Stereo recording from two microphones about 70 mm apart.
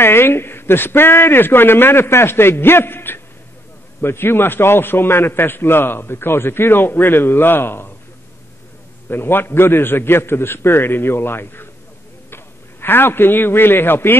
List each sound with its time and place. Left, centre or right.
0.0 s a man's voice: left
9.1 s a man's voice: left
12.8 s a man's voice: left